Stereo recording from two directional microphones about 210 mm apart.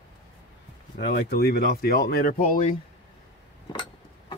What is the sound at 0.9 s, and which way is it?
Speech, 45° left (ahead or behind).